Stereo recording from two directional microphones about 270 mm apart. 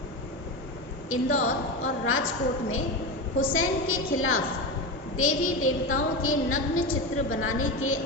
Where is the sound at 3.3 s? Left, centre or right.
Left.